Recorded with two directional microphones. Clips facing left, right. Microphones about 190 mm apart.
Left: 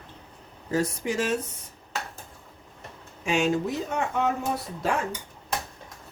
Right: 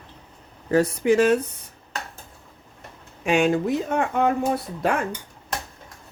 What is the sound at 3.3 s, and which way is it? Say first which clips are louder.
Speech: right 5 dB; 60° right (ahead or behind).